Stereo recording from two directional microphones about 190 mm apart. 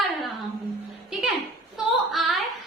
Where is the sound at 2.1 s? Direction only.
Centre (ahead or behind).